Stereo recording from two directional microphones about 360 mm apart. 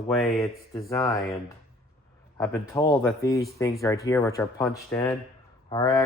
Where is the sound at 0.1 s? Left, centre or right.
Centre.